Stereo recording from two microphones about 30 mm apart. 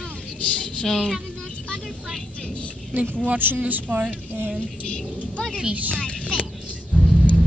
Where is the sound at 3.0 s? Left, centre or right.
Right.